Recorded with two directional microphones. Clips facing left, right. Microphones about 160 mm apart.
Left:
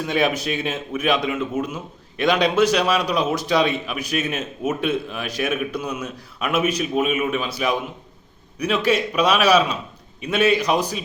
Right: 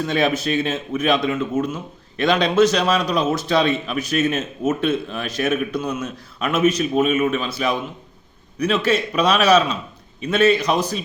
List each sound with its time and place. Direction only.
0.0 s a man's voice: 10° left (ahead or behind)